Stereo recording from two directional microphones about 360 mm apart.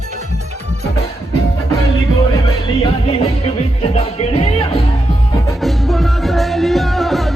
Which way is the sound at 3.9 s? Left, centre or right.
Centre.